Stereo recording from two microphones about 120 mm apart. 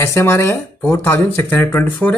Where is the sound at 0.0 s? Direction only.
20° left (ahead or behind).